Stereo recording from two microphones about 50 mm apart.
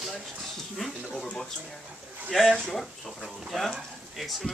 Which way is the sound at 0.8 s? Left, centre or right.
Centre.